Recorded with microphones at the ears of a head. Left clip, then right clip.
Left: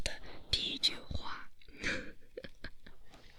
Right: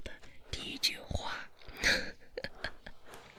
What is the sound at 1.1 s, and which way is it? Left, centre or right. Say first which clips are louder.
Whispering: right 5 dB; right.